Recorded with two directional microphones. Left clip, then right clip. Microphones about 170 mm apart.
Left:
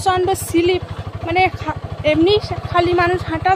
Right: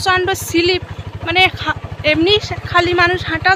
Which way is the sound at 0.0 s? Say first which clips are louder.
Right 1 dB; 10° left (ahead or behind).